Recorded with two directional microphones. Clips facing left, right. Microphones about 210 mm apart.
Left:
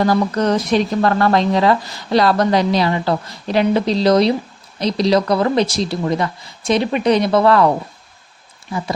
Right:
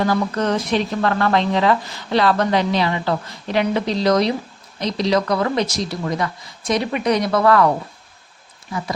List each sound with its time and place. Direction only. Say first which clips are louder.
0.0 s speech: left 3 dB; 40° left (ahead or behind)